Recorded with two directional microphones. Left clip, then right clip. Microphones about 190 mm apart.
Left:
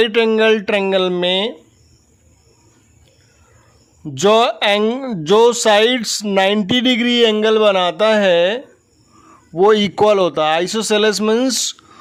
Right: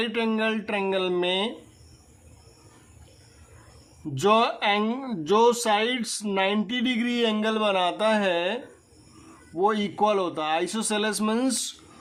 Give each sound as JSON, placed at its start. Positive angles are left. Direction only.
{"t": 0.0, "sound": "speech", "side_deg": 45}
{"t": 4.0, "sound": "speech", "side_deg": 45}